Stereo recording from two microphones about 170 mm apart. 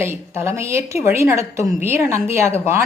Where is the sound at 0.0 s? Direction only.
15° right (ahead or behind).